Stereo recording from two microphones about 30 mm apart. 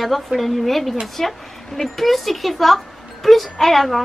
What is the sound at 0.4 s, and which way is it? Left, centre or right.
A woman's voice, centre.